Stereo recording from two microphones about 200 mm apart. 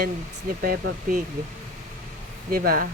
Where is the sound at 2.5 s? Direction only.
50° right (ahead or behind).